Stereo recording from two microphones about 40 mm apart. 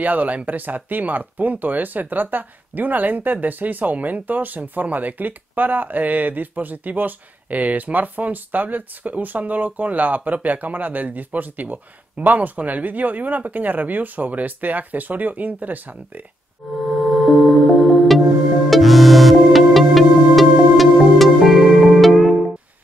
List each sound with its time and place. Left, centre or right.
0.0 s speech: right
16.6 s music: centre